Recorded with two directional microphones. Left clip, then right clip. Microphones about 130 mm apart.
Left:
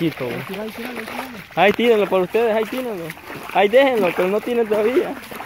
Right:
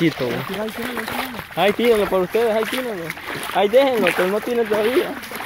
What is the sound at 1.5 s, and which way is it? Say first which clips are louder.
Speech: left 2 dB; 40° left (ahead or behind).